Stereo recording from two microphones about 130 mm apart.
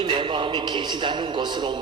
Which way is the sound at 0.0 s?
40° right (ahead or behind).